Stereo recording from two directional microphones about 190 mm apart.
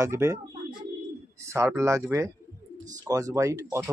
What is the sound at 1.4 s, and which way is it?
Speech, 15° right (ahead or behind).